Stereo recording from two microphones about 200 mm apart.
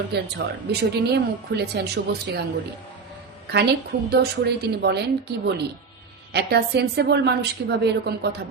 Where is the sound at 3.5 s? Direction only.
55° right (ahead or behind).